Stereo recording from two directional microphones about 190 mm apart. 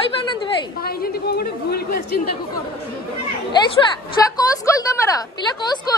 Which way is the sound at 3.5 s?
20° left (ahead or behind).